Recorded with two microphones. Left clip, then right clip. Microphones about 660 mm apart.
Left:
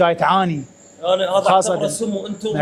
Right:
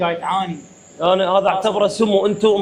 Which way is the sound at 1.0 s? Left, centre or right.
Right.